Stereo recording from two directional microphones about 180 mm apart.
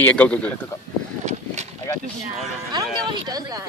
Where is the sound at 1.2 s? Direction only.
40° right (ahead or behind).